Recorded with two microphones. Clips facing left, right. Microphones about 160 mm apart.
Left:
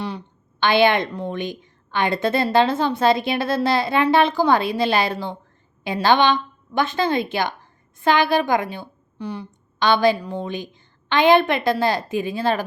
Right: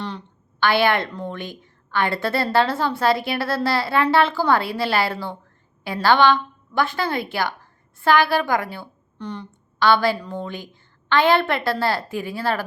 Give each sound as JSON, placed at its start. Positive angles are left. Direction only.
{"t": 0.6, "sound": "a woman's voice", "side_deg": 20}
{"t": 9.1, "sound": "speech", "side_deg": 10}
{"t": 9.7, "sound": "a woman's voice", "side_deg": 20}